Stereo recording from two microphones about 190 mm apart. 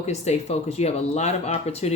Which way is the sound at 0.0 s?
35° left (ahead or behind).